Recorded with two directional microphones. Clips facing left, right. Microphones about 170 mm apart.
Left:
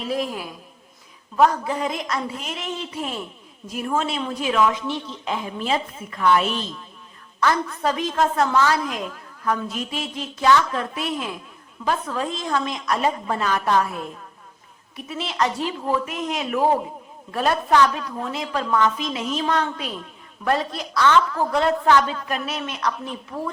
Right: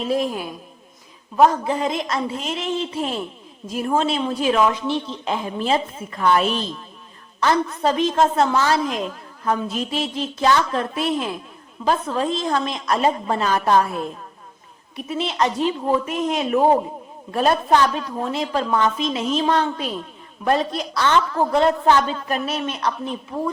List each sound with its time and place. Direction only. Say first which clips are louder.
0.1 s a woman's voice: right 3 dB; 25° right (ahead or behind)
7.3 s a woman's voice: right 2 dB; 30° right (ahead or behind)
14.9 s a woman's voice: right 3 dB; 20° right (ahead or behind)